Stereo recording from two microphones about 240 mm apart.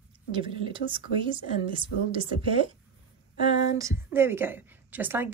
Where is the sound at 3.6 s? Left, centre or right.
Centre.